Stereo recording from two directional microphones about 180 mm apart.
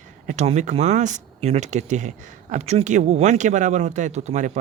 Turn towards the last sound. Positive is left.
turn(degrees=-40)  # may be behind; listen again after turning